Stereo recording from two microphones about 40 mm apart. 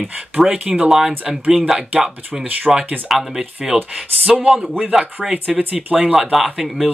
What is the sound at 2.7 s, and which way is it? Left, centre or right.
Speech, centre.